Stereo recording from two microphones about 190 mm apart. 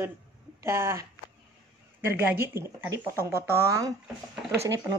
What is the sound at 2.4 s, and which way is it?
Speech, 15° right (ahead or behind).